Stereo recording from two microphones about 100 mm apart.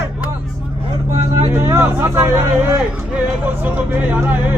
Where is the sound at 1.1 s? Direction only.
30° right (ahead or behind).